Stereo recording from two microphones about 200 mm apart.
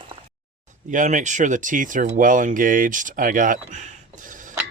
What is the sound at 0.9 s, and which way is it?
Speech, 40° right (ahead or behind).